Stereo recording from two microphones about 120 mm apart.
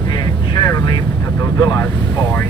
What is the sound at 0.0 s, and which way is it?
Vehicle, 40° left (ahead or behind).